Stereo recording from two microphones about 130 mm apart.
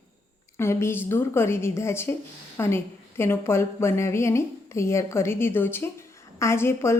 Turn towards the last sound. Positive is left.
turn(degrees=20)  # may be behind; listen again after turning